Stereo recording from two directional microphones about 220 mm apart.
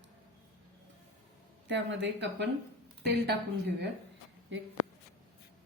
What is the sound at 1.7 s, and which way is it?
Speech, 55° right (ahead or behind).